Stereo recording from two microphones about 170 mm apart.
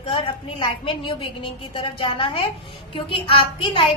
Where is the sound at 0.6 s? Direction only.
30° left (ahead or behind).